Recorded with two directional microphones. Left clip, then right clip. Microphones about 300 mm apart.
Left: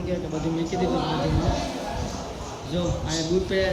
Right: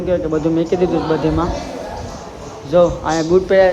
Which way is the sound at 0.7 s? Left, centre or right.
Centre.